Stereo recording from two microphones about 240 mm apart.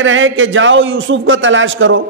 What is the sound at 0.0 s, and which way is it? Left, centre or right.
A man's voice, right.